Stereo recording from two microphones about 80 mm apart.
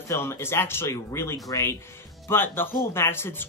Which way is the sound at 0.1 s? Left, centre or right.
Left.